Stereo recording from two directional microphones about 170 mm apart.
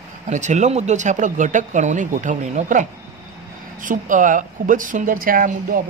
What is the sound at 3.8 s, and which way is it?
Speech, 50° right (ahead or behind).